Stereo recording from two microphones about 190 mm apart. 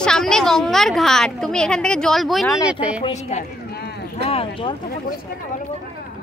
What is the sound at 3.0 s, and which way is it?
A woman's voice, 35° left (ahead or behind).